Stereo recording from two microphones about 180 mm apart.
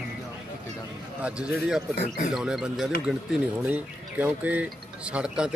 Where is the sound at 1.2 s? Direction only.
5° right (ahead or behind).